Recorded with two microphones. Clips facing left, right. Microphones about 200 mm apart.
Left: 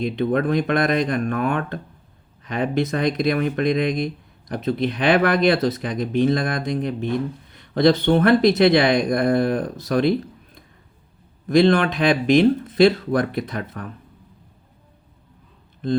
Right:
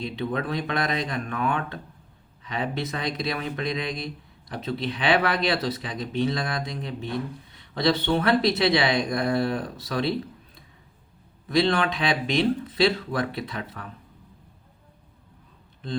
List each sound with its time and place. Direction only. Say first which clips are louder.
0.0 s speech: left 8 dB; 50° left (ahead or behind)